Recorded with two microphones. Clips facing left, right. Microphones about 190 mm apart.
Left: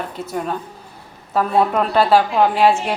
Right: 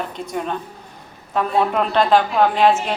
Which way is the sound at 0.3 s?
5° left (ahead or behind).